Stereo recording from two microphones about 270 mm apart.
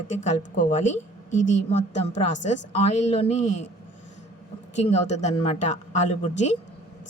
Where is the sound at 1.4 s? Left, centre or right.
Left.